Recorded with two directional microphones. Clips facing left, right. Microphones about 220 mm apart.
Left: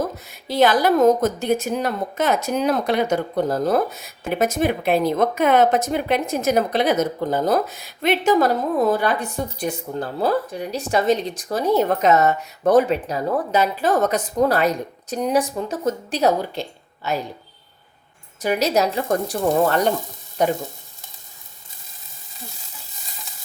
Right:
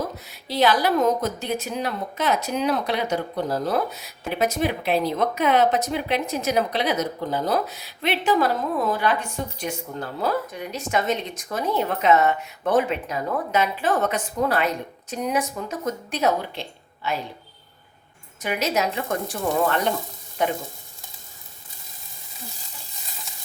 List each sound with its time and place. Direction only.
0.3 s speech: 50° left (ahead or behind)
18.3 s speech: 35° left (ahead or behind)
20.4 s speech: 40° left (ahead or behind)